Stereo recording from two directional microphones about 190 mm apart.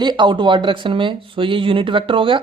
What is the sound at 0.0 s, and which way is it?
Speech, 25° right (ahead or behind).